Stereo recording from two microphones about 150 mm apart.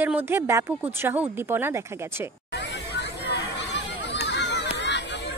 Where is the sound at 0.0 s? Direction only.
15° right (ahead or behind).